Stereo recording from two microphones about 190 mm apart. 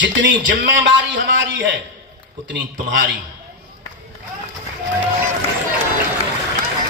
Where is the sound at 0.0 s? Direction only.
75° right (ahead or behind).